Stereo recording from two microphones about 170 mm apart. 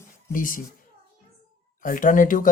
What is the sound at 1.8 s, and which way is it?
Speech, 50° left (ahead or behind).